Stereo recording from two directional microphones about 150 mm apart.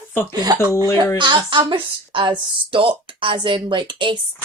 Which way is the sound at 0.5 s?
25° right (ahead or behind).